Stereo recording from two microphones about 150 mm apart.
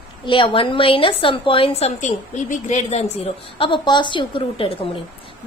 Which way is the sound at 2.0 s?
55° left (ahead or behind).